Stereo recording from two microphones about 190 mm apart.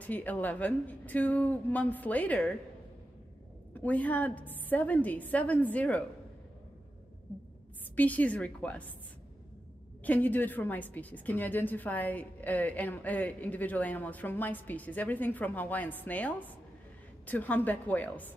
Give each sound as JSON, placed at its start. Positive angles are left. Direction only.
{"t": 0.0, "sound": "a woman's voice", "side_deg": 10}
{"t": 3.7, "sound": "a woman's voice", "side_deg": 10}
{"t": 7.9, "sound": "a woman's voice", "side_deg": 10}
{"t": 10.0, "sound": "a woman's voice", "side_deg": 10}